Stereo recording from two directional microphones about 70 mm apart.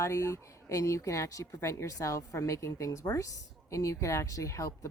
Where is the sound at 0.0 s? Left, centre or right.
Left.